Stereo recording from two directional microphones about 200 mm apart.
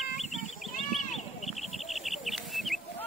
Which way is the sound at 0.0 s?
40° left (ahead or behind).